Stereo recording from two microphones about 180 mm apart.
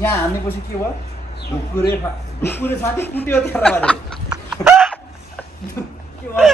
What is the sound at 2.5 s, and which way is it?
Speech, 10° left (ahead or behind).